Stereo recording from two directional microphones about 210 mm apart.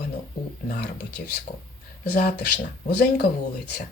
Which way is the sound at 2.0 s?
50° left (ahead or behind).